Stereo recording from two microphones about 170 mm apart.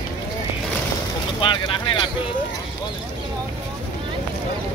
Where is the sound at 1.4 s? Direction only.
30° left (ahead or behind).